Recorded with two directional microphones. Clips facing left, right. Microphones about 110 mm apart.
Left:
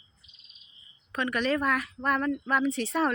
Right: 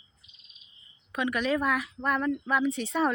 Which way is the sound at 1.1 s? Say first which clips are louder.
Even; 5° right (ahead or behind).